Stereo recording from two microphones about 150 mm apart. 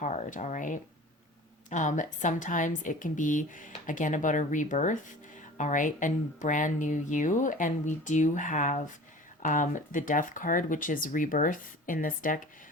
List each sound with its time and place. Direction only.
0.0 s speech: 55° left (ahead or behind)